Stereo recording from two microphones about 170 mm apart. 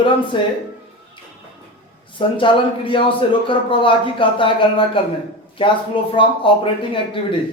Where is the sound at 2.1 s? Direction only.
30° left (ahead or behind).